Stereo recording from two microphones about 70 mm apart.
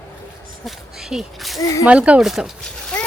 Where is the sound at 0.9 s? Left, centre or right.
Centre.